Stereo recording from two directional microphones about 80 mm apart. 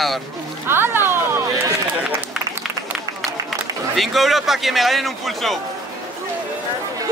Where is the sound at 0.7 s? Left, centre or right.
Right.